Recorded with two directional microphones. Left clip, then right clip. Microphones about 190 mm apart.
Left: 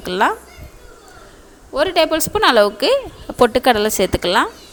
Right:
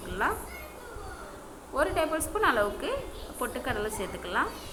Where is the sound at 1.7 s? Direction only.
45° left (ahead or behind); by 4.4 s 65° left (ahead or behind).